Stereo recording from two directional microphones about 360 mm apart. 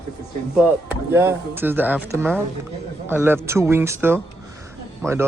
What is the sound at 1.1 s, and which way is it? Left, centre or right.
Speech, centre.